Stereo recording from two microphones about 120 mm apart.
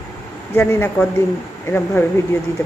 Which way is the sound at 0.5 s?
15° left (ahead or behind).